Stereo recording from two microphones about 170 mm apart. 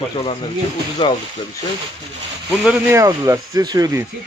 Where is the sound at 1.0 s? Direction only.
25° left (ahead or behind).